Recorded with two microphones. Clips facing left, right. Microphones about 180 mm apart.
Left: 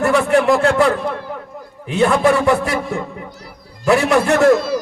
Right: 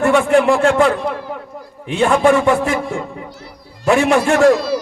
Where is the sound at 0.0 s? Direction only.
35° left (ahead or behind).